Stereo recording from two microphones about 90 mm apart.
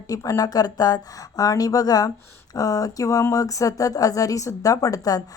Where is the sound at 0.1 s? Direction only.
40° left (ahead or behind).